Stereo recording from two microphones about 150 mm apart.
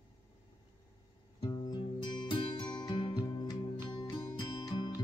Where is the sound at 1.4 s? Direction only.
25° left (ahead or behind).